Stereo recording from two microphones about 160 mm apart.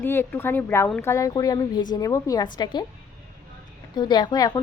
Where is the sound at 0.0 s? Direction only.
15° left (ahead or behind).